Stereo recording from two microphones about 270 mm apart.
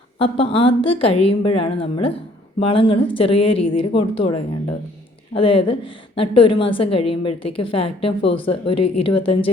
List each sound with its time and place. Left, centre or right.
0.2 s a woman's voice: centre
5.4 s a woman's voice: centre